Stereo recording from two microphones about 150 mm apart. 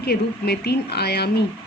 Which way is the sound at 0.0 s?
90° left.